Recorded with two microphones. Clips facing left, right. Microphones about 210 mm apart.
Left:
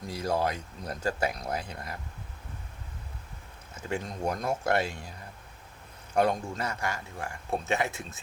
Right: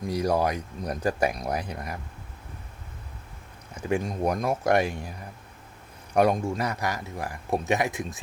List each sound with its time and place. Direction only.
0.1 s speech: 15° right (ahead or behind)
3.8 s speech: 15° right (ahead or behind)
6.1 s speech: 15° right (ahead or behind)